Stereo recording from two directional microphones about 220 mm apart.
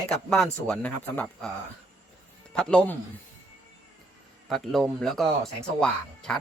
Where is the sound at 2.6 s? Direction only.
5° left (ahead or behind).